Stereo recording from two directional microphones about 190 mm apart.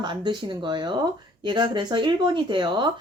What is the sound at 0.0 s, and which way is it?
Speech, 25° right (ahead or behind).